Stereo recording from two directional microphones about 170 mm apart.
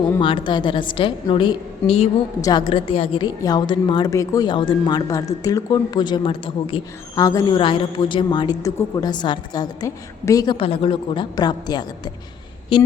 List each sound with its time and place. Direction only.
0.2 s a woman's voice: 30° left (ahead or behind)
7.2 s a woman's voice: 20° left (ahead or behind)